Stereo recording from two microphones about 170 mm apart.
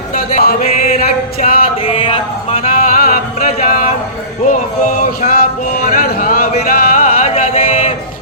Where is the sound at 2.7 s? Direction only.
55° left (ahead or behind).